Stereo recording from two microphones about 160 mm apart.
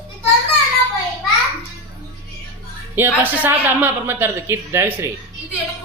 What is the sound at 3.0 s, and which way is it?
Speech, 10° right (ahead or behind).